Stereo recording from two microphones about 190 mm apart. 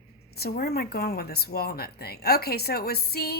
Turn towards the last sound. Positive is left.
turn(degrees=55)  # may be behind; listen again after turning